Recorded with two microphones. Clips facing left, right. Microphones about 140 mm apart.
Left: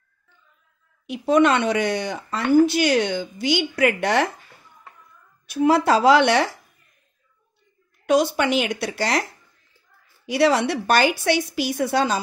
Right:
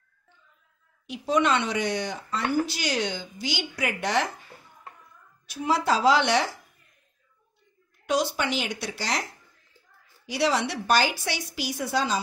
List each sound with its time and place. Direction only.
1.0 s speech: 55° left (ahead or behind)
5.5 s speech: 60° left (ahead or behind)
8.1 s speech: 55° left (ahead or behind)
10.2 s speech: 60° left (ahead or behind)